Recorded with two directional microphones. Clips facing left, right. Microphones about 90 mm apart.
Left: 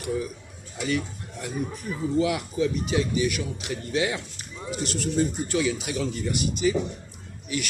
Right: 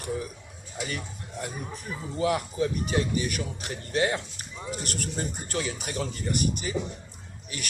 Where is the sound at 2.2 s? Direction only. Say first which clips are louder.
Left 1 dB; 40° right (ahead or behind).